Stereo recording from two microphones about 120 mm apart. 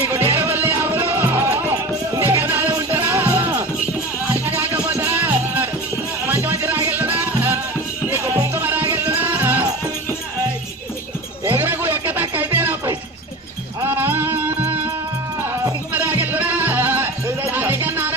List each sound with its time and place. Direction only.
0.1 s music: 20° right (ahead or behind)
11.4 s music: 15° right (ahead or behind)
15.9 s music: 15° right (ahead or behind)